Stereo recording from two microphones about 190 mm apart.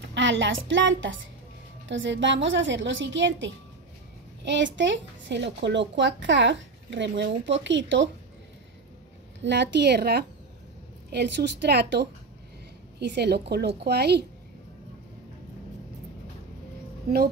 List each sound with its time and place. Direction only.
0.0 s a woman's voice: 75° right (ahead or behind)
9.4 s a woman's voice: 65° right (ahead or behind)